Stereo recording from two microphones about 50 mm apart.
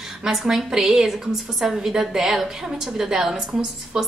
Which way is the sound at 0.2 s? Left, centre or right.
Centre.